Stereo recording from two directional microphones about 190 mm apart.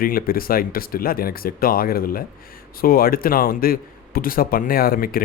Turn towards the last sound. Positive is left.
turn(degrees=50)  # may be behind; listen again after turning